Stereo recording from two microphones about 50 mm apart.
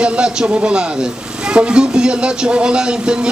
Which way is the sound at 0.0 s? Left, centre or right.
Centre.